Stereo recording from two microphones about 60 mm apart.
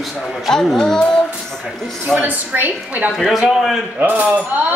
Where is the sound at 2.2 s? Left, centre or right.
Right.